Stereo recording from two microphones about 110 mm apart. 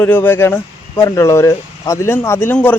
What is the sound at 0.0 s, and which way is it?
A man's voice, 20° left (ahead or behind).